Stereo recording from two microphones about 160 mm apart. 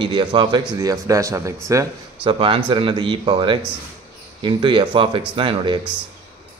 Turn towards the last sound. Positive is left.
turn(degrees=-30)  # may be behind; listen again after turning